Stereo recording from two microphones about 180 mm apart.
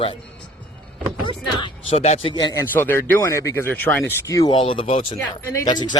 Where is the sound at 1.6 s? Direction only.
35° left (ahead or behind).